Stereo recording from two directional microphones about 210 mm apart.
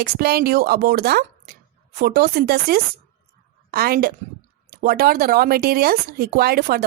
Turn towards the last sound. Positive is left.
turn(degrees=-45)  # may be behind; listen again after turning